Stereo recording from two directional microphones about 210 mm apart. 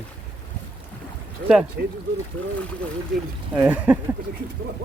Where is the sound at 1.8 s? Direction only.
50° right (ahead or behind).